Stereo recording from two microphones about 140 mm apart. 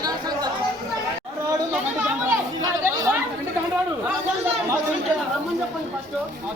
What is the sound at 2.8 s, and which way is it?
Chatter, 15° right (ahead or behind).